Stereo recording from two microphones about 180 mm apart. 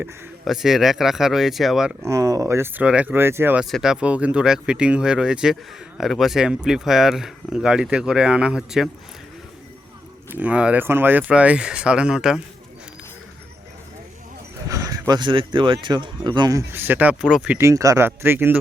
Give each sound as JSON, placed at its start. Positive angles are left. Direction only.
{"t": 0.0, "sound": "speech", "side_deg": 0}
{"t": 2.0, "sound": "speech", "side_deg": -15}
{"t": 10.2, "sound": "speech", "side_deg": -10}
{"t": 14.7, "sound": "speech", "side_deg": -20}
{"t": 17.6, "sound": "speech", "side_deg": -15}